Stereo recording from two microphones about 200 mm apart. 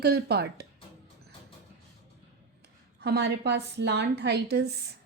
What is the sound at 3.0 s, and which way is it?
A woman's voice, 55° right (ahead or behind).